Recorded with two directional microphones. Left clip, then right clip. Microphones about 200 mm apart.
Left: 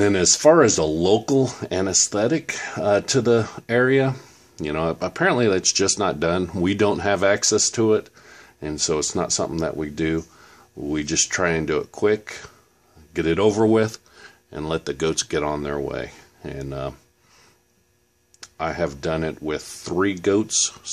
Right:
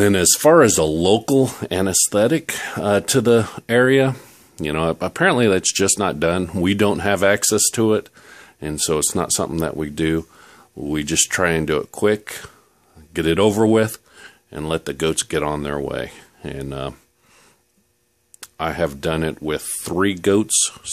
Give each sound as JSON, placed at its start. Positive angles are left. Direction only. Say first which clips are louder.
{"t": 0.0, "sound": "speech", "louder": "right 1 dB", "side_deg": -45}
{"t": 18.4, "sound": "speech", "louder": "right 3 dB", "side_deg": -40}